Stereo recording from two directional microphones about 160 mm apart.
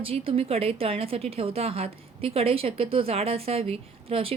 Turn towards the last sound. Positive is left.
turn(degrees=-35)  # may be behind; listen again after turning